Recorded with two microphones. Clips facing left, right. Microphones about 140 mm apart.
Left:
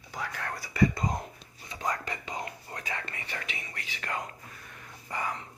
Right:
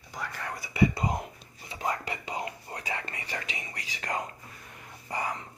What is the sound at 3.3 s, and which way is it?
Speech, 35° right (ahead or behind).